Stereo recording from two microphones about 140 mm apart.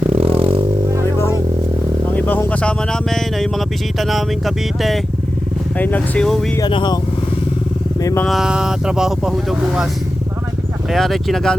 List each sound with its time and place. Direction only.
0.1 s a sound: 45° right (ahead or behind)
2.1 s speech: 15° left (ahead or behind)
5.7 s speech: 10° left (ahead or behind)
6.6 s speech: 35° left (ahead or behind)
8.3 s speech: 5° right (ahead or behind)
10.9 s speech: centre (ahead or behind)